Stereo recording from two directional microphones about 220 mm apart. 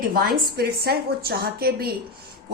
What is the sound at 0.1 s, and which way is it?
A woman's voice, 45° right (ahead or behind).